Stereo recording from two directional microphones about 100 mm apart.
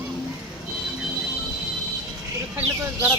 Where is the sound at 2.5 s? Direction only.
20° right (ahead or behind).